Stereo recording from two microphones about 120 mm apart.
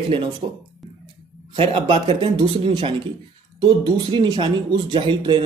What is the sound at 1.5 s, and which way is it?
A man's voice, 50° right (ahead or behind).